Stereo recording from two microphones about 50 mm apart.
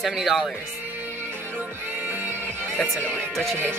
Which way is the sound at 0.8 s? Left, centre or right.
Right.